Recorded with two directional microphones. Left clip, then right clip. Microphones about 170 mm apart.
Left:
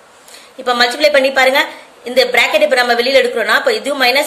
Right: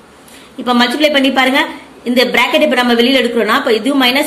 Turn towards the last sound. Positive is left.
turn(degrees=25)  # may be behind; listen again after turning